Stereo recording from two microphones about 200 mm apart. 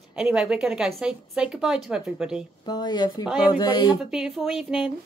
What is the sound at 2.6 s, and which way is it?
Speech, 20° left (ahead or behind).